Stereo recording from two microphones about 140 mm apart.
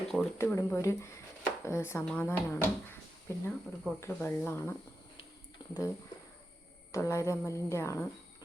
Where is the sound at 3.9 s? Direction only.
15° left (ahead or behind).